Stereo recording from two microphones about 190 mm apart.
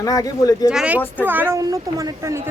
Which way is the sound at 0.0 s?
20° left (ahead or behind).